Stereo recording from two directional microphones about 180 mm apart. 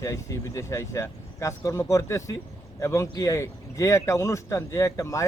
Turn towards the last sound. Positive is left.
turn(degrees=15)  # may be behind; listen again after turning